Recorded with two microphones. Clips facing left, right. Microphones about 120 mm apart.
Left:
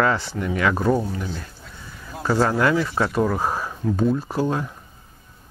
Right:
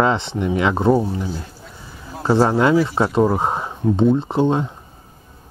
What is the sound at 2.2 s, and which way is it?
Speech, 25° right (ahead or behind).